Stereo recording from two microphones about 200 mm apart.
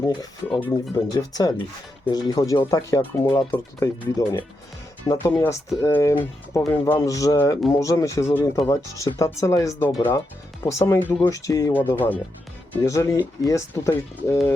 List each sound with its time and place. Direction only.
0.4 s speech: 5° left (ahead or behind)
0.9 s speech: 20° left (ahead or behind)